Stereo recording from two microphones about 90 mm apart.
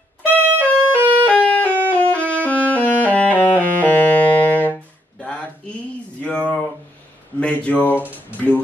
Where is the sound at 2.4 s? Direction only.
15° left (ahead or behind).